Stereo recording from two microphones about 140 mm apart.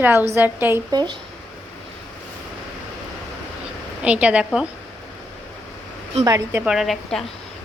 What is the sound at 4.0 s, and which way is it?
Speech, 10° right (ahead or behind).